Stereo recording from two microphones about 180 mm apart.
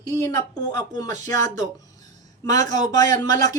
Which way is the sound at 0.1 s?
15° left (ahead or behind).